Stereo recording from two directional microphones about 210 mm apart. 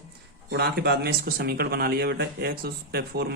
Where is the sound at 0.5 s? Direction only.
50° right (ahead or behind).